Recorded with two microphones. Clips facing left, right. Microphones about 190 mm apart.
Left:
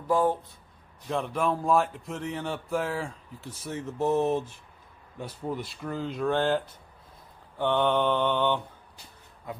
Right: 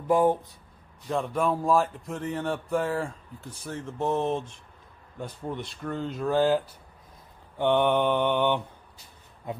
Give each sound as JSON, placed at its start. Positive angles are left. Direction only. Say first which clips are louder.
{"t": 0.0, "sound": "speech", "louder": "right 3 dB", "side_deg": -20}
{"t": 1.0, "sound": "speech", "louder": "right 1 dB", "side_deg": 0}
{"t": 7.5, "sound": "mantra", "louder": "right 2 dB", "side_deg": -15}